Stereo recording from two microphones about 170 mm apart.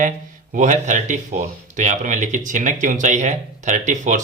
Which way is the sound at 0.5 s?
45° right (ahead or behind).